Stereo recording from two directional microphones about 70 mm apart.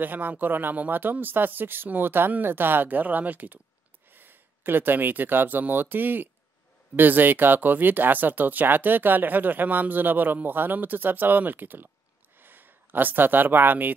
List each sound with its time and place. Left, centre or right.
0.0 s speech: right